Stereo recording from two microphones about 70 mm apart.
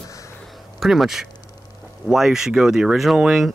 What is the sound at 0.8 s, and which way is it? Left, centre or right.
Speech, centre.